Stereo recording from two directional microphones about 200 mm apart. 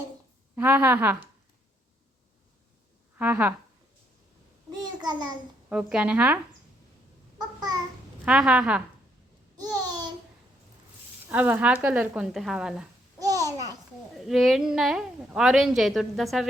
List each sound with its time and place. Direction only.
0.5 s a woman's voice: 10° right (ahead or behind)
3.2 s a woman's voice: 10° right (ahead or behind)
4.7 s a sound: 20° right (ahead or behind)
5.6 s a woman's voice: 5° right (ahead or behind)
7.3 s babbling: 20° right (ahead or behind)
8.2 s a woman's voice: 5° right (ahead or behind)
9.6 s babbling: 20° right (ahead or behind)
11.3 s a woman's voice: 10° right (ahead or behind)
13.1 s babbling: 15° right (ahead or behind)
14.3 s a woman's voice: centre (ahead or behind)